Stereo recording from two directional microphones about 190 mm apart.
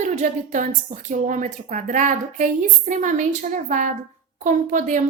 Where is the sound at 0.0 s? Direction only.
40° right (ahead or behind).